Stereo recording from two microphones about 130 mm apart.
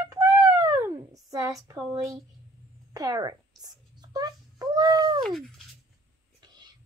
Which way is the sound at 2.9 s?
30° right (ahead or behind).